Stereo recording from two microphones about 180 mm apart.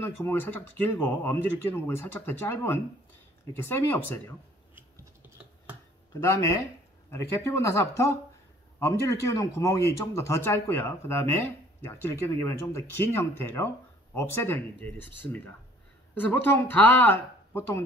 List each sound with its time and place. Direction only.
0.0 s speech: 10° left (ahead or behind)
4.7 s scissors: 10° right (ahead or behind)
6.2 s speech: 15° left (ahead or behind)